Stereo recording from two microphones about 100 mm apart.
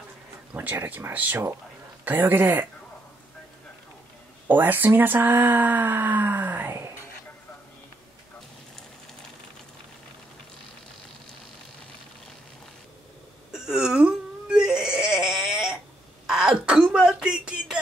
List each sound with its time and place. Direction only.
0.6 s speech: 20° right (ahead or behind)
4.5 s speech: 20° right (ahead or behind)
13.5 s wail: 5° right (ahead or behind)
16.3 s a sound: 5° right (ahead or behind)